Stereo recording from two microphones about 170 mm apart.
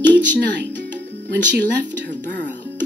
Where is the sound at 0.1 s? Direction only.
90° right.